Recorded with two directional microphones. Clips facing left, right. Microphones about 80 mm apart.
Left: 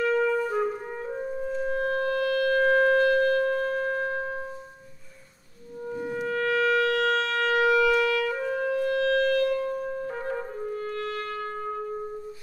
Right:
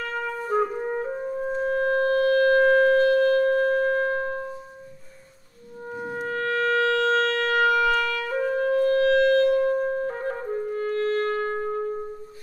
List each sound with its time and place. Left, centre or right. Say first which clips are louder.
0.5 s music: right 4 dB; right
1.4 s wind instrument: right 4 dB; right
5.9 s wind instrument: even; right